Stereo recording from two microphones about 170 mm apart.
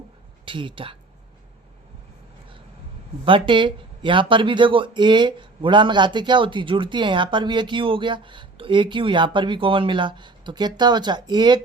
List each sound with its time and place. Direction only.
0.4 s speech: 30° right (ahead or behind)
3.2 s speech: 30° right (ahead or behind)